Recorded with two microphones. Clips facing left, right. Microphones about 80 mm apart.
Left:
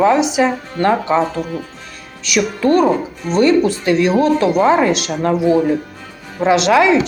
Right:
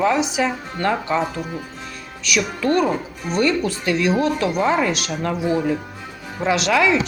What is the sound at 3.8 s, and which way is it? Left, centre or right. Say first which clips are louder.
Speech: left 3 dB; left.